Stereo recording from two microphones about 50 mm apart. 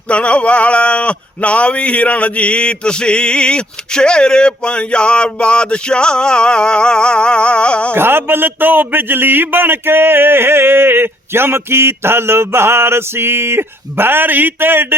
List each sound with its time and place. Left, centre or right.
0.1 s speech: left
7.9 s a man's voice: right